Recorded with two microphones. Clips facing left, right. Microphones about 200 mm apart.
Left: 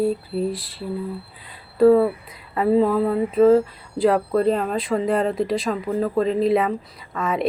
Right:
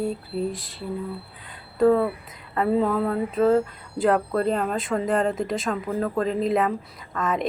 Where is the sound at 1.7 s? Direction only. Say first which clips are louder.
Left 5 dB; 5° left (ahead or behind).